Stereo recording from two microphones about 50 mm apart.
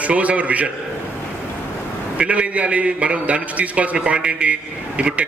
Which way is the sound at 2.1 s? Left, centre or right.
Right.